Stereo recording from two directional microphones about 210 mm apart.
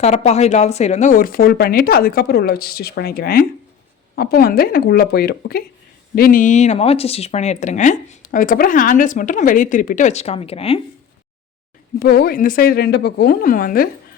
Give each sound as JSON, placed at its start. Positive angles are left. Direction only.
{"t": 0.0, "sound": "speech", "side_deg": 30}
{"t": 11.9, "sound": "speech", "side_deg": 45}